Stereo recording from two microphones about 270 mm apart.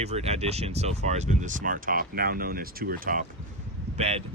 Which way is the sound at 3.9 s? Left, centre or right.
Right.